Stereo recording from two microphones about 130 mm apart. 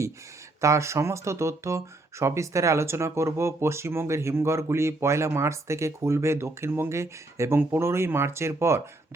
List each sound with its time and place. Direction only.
0.6 s speech: 25° right (ahead or behind)